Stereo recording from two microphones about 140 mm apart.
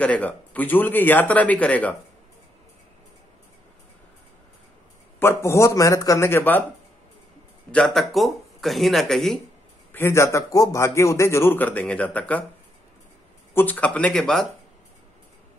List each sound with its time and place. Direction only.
0.0 s speech: 10° left (ahead or behind)
5.2 s a man's voice: 15° left (ahead or behind)
7.7 s speech: 5° left (ahead or behind)
9.9 s a man's voice: 20° left (ahead or behind)
13.6 s speech: 10° left (ahead or behind)